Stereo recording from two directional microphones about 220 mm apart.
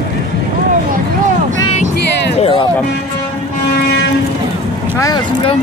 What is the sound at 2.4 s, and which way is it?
Music, 25° left (ahead or behind).